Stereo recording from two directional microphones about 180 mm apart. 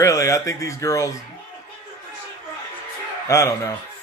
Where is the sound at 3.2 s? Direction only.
15° left (ahead or behind).